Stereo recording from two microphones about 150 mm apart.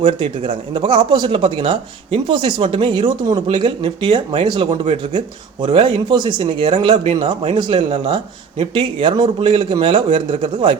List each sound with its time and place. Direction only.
0.0 s speech: 35° right (ahead or behind)